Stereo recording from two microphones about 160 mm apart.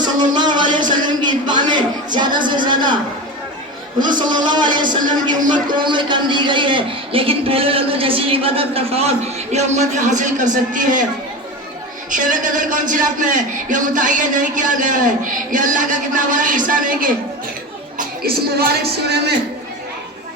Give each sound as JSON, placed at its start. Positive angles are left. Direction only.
{"t": 0.0, "sound": "a sound", "side_deg": -25}
{"t": 2.1, "sound": "music", "side_deg": -30}
{"t": 4.3, "sound": "a man's voice", "side_deg": -25}
{"t": 12.1, "sound": "a man's voice", "side_deg": -55}
{"t": 17.9, "sound": "speech", "side_deg": -70}